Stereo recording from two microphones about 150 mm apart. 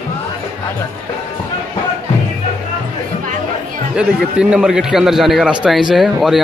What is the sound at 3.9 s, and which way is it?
A man's voice, 5° right (ahead or behind).